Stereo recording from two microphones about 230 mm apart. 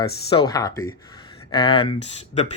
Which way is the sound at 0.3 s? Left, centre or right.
Centre.